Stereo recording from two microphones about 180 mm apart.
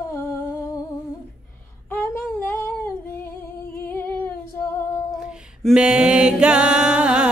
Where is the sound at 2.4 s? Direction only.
10° left (ahead or behind).